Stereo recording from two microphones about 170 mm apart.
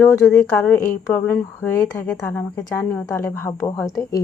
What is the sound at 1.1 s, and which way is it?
Speech, 10° left (ahead or behind).